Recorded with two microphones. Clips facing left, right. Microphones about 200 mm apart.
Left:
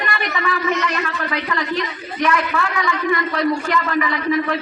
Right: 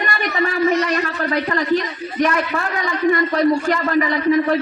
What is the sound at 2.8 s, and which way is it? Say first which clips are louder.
A woman's voice: right 3 dB; 35° right (ahead or behind).